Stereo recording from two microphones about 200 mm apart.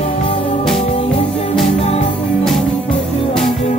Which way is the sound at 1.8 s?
30° left (ahead or behind).